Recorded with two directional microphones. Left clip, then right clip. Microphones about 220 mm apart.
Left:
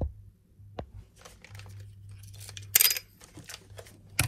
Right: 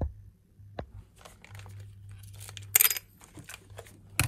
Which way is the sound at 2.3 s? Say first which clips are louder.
Left 1 dB; 35° right (ahead or behind).